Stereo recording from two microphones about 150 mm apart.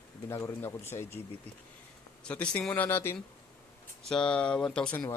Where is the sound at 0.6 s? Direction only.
15° left (ahead or behind).